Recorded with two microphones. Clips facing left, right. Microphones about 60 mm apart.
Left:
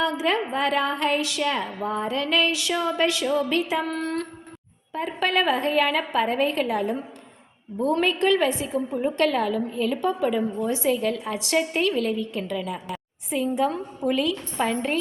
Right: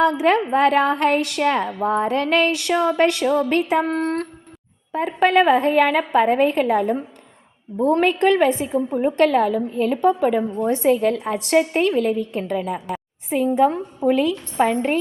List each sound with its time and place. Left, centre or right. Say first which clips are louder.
0.0 s a woman's voice: right 7 dB; right